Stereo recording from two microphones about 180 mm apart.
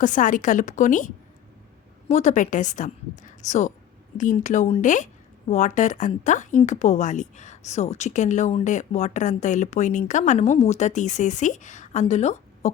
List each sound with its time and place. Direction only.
0.0 s a woman's voice: 45° left (ahead or behind)